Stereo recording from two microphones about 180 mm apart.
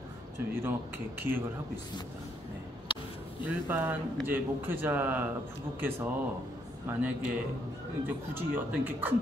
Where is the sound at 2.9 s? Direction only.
30° left (ahead or behind).